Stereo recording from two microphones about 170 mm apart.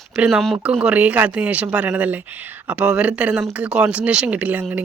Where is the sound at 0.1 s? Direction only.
5° right (ahead or behind).